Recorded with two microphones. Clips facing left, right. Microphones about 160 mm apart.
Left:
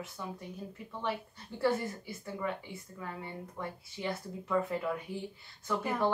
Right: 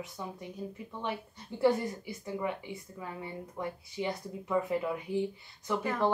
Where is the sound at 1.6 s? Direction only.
15° right (ahead or behind).